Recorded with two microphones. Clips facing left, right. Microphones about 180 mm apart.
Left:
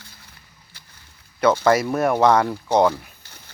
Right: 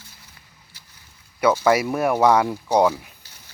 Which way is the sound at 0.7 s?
55° left (ahead or behind).